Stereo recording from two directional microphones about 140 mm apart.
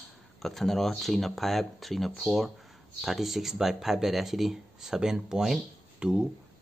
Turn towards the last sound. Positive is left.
turn(degrees=-5)  # may be behind; listen again after turning